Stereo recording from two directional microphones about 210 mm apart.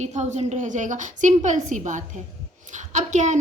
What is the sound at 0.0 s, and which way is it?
A woman's voice, 35° right (ahead or behind).